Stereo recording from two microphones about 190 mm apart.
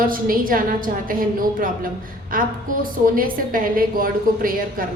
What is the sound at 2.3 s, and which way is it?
A woman's voice, 45° right (ahead or behind).